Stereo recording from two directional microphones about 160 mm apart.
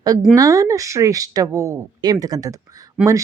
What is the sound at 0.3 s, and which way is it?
A woman's voice, 20° right (ahead or behind).